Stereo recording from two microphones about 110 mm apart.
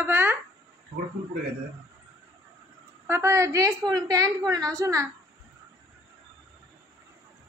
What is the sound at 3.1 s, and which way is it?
A woman's voice, 25° right (ahead or behind).